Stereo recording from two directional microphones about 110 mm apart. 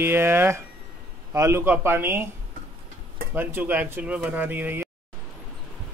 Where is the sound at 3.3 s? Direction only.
20° right (ahead or behind).